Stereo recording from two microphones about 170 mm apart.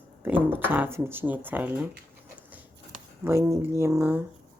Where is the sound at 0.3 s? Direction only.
10° right (ahead or behind).